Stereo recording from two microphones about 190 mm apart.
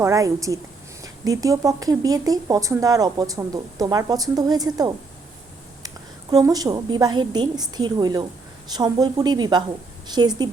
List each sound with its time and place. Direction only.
0.0 s a woman's voice: 15° right (ahead or behind)
6.3 s speech: 20° right (ahead or behind)